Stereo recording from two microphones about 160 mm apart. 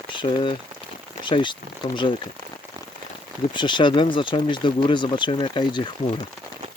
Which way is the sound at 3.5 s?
30° left (ahead or behind).